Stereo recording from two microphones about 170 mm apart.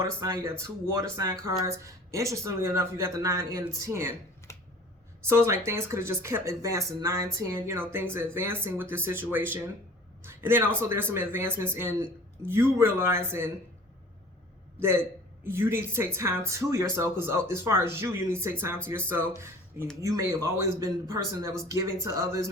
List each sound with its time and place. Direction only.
0.0 s speech: 20° right (ahead or behind)
4.5 s a sound: 15° left (ahead or behind)
5.2 s speech: 15° right (ahead or behind)
14.8 s a man's voice: 15° right (ahead or behind)